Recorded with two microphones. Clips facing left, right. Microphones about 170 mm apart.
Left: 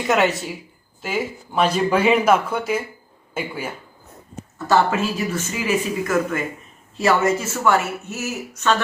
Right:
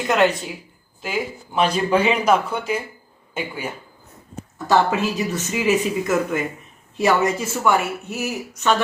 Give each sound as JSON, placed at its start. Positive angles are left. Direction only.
{"t": 0.1, "sound": "speech", "side_deg": 5}
{"t": 4.5, "sound": "speech", "side_deg": -15}